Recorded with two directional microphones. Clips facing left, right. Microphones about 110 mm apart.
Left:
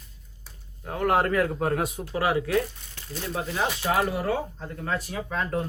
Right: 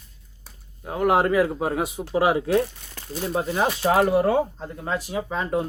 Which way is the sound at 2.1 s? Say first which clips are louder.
Right 4 dB; 20° right (ahead or behind).